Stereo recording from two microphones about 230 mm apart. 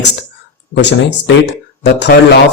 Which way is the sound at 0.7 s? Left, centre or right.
Left.